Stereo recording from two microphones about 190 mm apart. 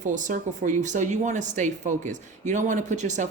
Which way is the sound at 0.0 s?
40° right (ahead or behind).